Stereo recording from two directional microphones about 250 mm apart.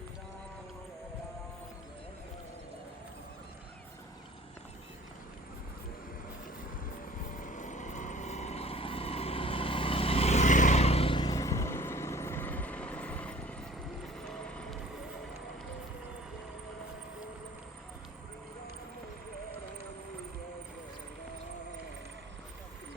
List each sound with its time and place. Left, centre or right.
7.3 s vehicle: left; by 14.8 s centre